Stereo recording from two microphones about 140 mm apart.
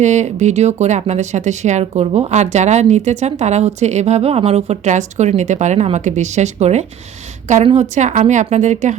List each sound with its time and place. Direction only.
0.0 s a woman's voice: 55° right (ahead or behind)